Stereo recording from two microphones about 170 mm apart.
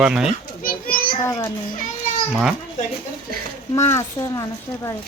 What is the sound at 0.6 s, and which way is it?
Child singing, 55° left (ahead or behind).